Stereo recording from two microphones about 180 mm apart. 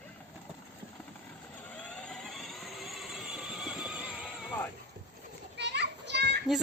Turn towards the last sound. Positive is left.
turn(degrees=-70)  # may be behind; listen again after turning